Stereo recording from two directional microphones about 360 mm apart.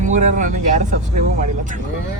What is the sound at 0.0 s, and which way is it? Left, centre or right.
Speech, right.